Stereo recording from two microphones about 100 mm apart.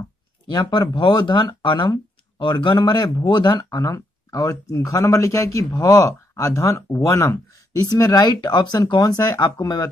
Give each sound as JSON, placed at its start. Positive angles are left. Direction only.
{"t": 0.5, "sound": "speech", "side_deg": 45}
{"t": 3.8, "sound": "speech", "side_deg": 35}